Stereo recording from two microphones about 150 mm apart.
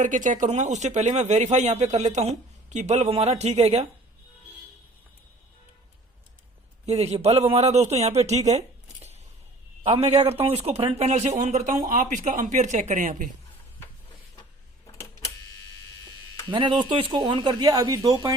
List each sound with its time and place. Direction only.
0.0 s speech: 55° right (ahead or behind)
6.8 s speech: 45° right (ahead or behind)
16.5 s speech: 30° right (ahead or behind)